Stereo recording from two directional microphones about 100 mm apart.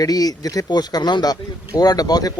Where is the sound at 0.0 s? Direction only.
40° left (ahead or behind).